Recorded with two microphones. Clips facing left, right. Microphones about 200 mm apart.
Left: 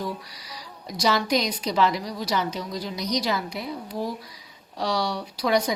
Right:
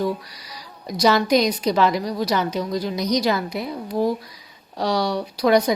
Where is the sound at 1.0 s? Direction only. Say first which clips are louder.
Right 6 dB; 55° right (ahead or behind).